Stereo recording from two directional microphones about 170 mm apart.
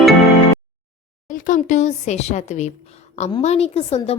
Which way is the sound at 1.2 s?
50° left (ahead or behind).